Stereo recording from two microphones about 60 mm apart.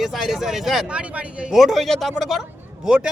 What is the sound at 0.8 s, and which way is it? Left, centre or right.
Speech, centre.